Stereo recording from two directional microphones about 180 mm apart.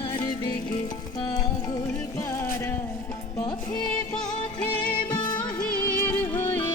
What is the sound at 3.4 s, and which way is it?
Music, 20° left (ahead or behind).